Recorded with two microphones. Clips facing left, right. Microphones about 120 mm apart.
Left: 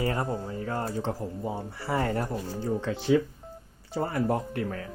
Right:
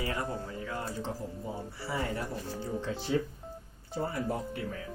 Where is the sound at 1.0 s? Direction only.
60° left (ahead or behind).